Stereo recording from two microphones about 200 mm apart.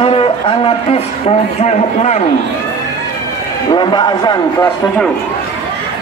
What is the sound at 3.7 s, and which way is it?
A man's voice, 20° left (ahead or behind).